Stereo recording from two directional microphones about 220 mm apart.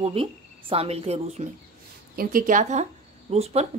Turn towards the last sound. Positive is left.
turn(degrees=-30)  # may be behind; listen again after turning